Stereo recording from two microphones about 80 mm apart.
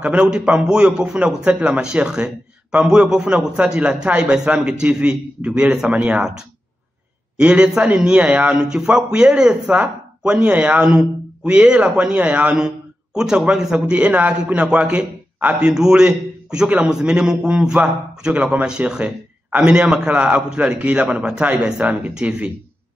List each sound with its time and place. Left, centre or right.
0.0 s a man's voice: centre
7.3 s a man's voice: centre
9.7 s a man's voice: right